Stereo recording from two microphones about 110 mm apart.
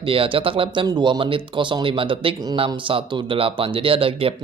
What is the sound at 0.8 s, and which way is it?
Speech, 40° right (ahead or behind).